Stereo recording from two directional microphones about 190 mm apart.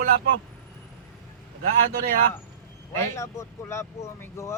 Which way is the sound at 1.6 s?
50° right (ahead or behind).